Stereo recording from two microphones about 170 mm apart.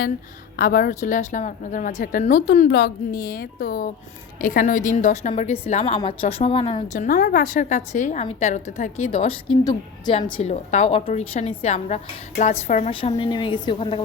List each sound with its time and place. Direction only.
0.5 s a woman's voice: 55° left (ahead or behind)
2.6 s a woman's voice: 80° left; by 6.8 s 30° left (ahead or behind)
6.8 s a woman's voice: 45° left (ahead or behind)
12.9 s a woman's voice: 30° left (ahead or behind)